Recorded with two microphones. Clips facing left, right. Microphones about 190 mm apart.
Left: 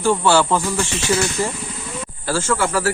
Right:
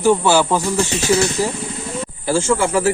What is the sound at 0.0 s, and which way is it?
Speech, 15° right (ahead or behind).